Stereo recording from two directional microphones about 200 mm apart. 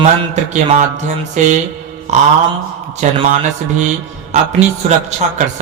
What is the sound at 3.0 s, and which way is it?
Speech, 35° right (ahead or behind).